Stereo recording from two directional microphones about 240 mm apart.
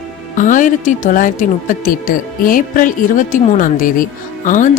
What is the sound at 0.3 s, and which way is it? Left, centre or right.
Speech, left.